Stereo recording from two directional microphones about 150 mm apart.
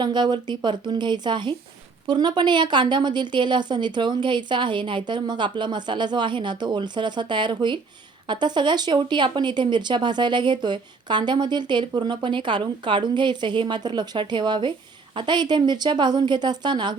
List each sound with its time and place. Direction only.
0.0 s a woman's voice: 30° right (ahead or behind)